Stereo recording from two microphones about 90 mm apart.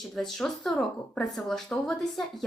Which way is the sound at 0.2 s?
5° left (ahead or behind).